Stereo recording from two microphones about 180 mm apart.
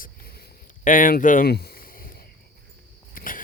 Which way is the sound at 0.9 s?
50° left (ahead or behind).